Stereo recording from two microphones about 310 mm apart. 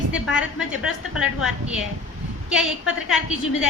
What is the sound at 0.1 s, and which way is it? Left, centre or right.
Speech, centre.